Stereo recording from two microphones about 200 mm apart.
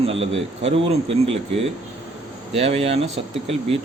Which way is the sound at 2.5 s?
30° right (ahead or behind).